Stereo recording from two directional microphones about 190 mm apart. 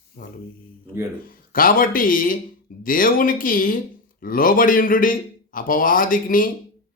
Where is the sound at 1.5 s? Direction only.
50° left (ahead or behind).